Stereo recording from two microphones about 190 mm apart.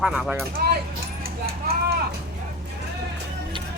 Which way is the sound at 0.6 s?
55° right (ahead or behind).